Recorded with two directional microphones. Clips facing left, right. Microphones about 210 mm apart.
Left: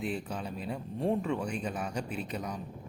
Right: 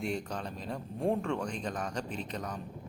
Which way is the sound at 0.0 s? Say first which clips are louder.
Even; 5° left (ahead or behind).